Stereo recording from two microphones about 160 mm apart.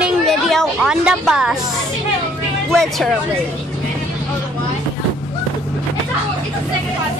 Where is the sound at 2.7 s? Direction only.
5° left (ahead or behind).